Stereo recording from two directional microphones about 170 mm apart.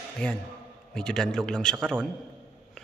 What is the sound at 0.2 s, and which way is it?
A man's voice, 5° left (ahead or behind).